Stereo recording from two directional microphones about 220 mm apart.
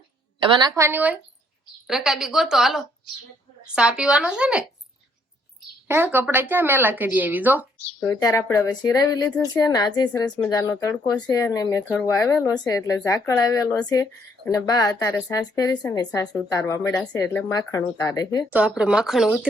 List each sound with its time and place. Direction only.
0.3 s a woman's voice: 20° right (ahead or behind)
0.8 s a woman's voice: 10° right (ahead or behind)
5.9 s speech: 10° right (ahead or behind)
8.0 s speech: 15° left (ahead or behind)
10.1 s a woman's voice: 5° left (ahead or behind)
18.5 s a woman's voice: 5° right (ahead or behind)